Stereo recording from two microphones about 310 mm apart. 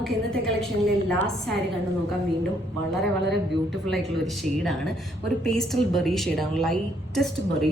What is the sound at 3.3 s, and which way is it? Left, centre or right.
A woman's voice, centre.